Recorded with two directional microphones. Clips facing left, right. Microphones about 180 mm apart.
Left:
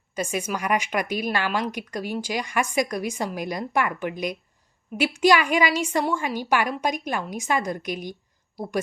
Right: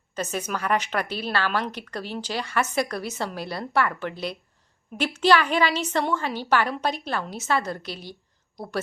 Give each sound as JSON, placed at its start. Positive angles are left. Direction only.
{"t": 0.1, "sound": "a woman's voice", "side_deg": 10}